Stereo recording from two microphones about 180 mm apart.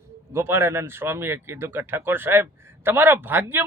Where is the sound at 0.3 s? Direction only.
15° right (ahead or behind).